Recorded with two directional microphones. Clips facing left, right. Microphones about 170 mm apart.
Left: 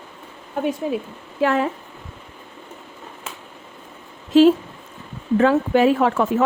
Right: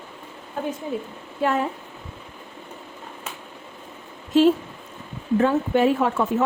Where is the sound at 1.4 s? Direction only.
90° left.